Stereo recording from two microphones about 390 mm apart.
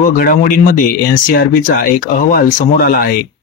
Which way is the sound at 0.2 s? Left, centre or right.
Left.